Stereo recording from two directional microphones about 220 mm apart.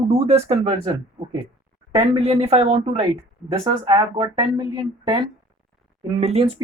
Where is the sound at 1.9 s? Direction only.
25° right (ahead or behind).